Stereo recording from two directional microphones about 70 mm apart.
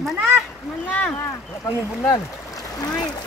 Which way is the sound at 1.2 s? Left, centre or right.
Left.